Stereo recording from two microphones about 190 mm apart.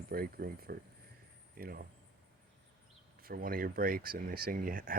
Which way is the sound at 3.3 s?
50° right (ahead or behind).